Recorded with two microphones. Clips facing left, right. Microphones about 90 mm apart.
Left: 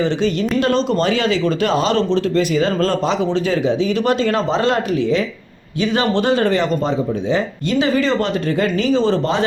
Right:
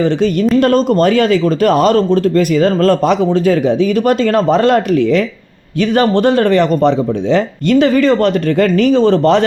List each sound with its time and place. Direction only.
0.6 s speech: 50° right (ahead or behind)